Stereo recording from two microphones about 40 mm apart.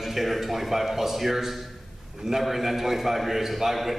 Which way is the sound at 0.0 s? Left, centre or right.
Centre.